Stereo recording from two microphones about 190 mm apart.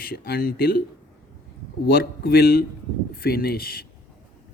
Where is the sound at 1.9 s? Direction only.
55° left (ahead or behind).